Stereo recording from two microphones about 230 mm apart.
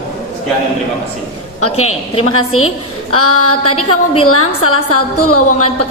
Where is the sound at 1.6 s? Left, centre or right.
Left.